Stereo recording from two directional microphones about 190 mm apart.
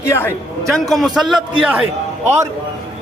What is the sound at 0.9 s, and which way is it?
Speech, centre (ahead or behind).